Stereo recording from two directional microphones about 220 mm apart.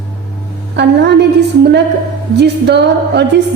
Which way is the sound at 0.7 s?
50° right (ahead or behind).